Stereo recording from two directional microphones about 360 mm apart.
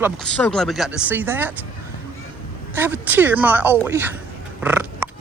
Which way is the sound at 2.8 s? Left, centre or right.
Centre.